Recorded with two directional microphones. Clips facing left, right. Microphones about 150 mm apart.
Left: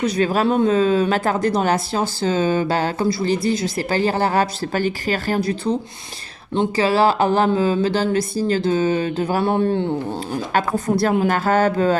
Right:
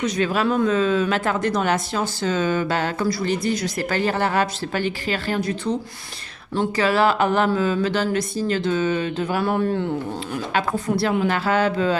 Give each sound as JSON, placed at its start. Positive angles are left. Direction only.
{"t": 0.0, "sound": "speech", "side_deg": 40}
{"t": 10.5, "sound": "a woman's voice", "side_deg": 45}